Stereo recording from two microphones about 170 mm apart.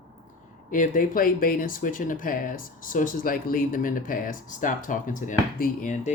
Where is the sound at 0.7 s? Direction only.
50° left (ahead or behind).